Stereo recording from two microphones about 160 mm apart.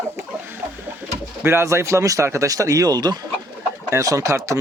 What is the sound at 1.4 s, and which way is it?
Speech, 15° right (ahead or behind).